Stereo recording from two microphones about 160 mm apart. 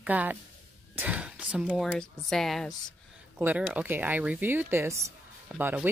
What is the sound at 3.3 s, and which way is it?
Speech, 10° right (ahead or behind).